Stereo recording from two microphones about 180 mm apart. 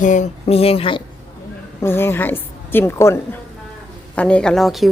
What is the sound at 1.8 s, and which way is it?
A woman's voice, 15° left (ahead or behind).